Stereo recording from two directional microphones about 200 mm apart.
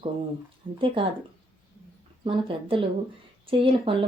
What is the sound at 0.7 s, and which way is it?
Speech, 25° right (ahead or behind).